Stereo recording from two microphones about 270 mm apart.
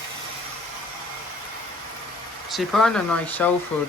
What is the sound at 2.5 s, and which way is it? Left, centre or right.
Speech, centre.